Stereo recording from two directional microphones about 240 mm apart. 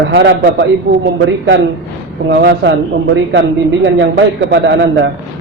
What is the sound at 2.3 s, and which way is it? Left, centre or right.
A man's voice, right.